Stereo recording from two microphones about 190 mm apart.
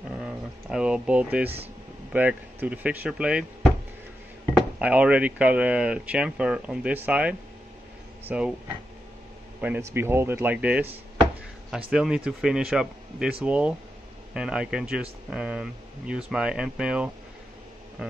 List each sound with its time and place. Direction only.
0.2 s a sound: 5° right (ahead or behind)
2.1 s speech: 10° right (ahead or behind)
4.6 s speech: 5° right (ahead or behind)
9.6 s speech: 10° right (ahead or behind)